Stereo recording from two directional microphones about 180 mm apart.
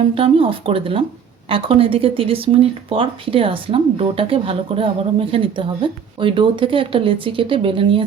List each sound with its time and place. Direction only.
0.0 s speech: 30° right (ahead or behind)